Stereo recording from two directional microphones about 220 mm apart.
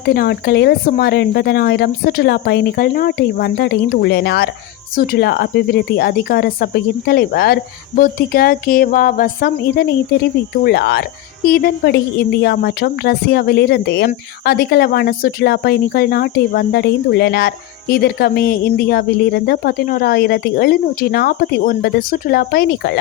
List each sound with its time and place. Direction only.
0.0 s speech: 45° left (ahead or behind)